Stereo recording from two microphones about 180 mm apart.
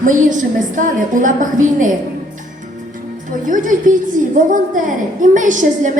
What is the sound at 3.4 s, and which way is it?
A woman's voice, 45° right (ahead or behind).